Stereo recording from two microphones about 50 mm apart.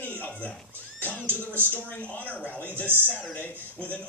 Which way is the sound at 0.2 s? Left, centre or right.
Left.